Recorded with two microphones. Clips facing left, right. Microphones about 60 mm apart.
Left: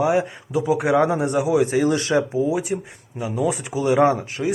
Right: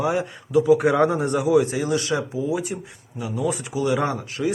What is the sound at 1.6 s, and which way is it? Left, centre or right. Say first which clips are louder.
Speech: left 4 dB; left.